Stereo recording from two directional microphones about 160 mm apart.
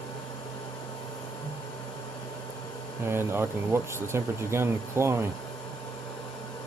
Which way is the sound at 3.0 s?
15° right (ahead or behind).